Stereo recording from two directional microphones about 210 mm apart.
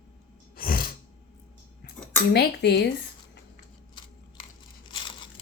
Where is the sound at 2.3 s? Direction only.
50° left (ahead or behind).